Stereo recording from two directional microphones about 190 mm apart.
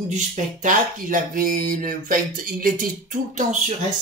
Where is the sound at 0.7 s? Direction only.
45° right (ahead or behind).